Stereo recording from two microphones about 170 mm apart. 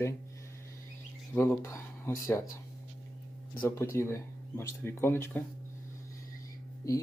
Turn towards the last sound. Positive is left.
turn(degrees=20)  # may be behind; listen again after turning